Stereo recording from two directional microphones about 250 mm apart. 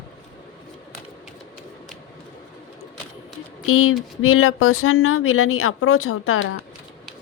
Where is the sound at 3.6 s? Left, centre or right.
Left.